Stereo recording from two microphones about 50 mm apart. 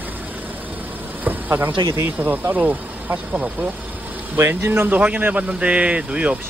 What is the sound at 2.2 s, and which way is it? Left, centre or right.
Speech, right.